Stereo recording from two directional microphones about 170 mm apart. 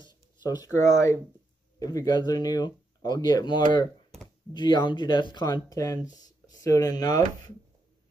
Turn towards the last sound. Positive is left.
turn(degrees=20)  # may be behind; listen again after turning